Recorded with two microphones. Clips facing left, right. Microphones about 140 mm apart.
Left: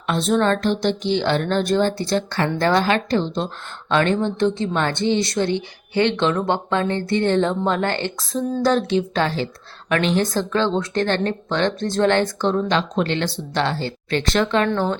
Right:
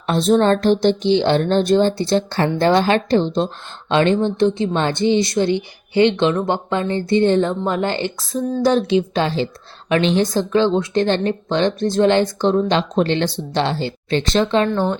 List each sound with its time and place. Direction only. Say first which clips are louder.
0.1 s a woman's voice: right 4 dB; 35° right (ahead or behind); by 7.4 s 15° right (ahead or behind)
7.4 s a woman's voice: right 1 dB; 5° right (ahead or behind); by 14.7 s 20° right (ahead or behind)